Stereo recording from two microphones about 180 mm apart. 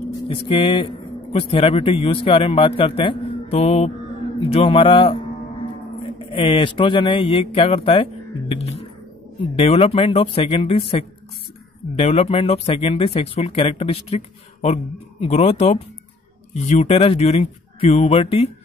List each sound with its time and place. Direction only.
0.3 s a man's voice: 30° left (ahead or behind)